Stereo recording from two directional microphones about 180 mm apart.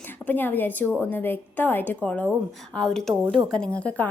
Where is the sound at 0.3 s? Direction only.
10° left (ahead or behind).